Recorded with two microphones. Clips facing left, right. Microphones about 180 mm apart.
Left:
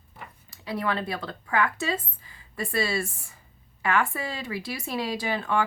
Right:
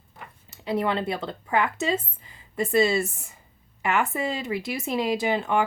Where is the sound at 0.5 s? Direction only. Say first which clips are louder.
Right 4 dB; 25° right (ahead or behind).